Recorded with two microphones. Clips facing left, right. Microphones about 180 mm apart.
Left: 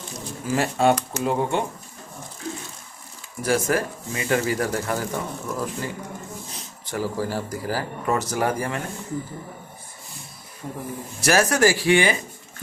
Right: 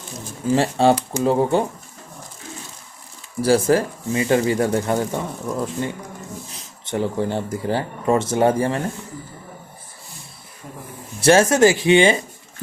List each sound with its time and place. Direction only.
0.5 s speech: 30° right (ahead or behind)
3.4 s speech: 30° right (ahead or behind)
11.2 s speech: 25° right (ahead or behind)